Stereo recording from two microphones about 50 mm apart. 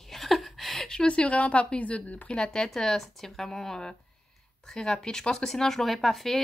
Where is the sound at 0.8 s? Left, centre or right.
Centre.